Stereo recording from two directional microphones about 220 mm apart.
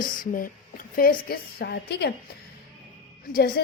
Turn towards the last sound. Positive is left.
turn(degrees=40)  # may be behind; listen again after turning